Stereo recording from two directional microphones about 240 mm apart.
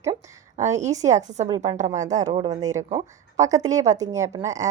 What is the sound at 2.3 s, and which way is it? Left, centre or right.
A woman's voice, centre.